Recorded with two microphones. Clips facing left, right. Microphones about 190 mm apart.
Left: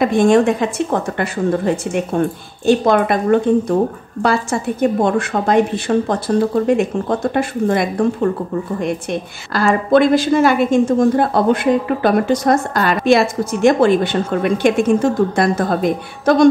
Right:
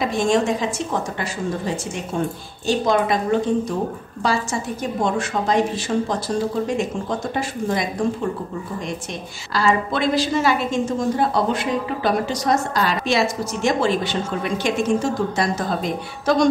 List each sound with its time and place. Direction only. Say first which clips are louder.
0.0 s a woman's voice: left 7 dB; 55° left (ahead or behind)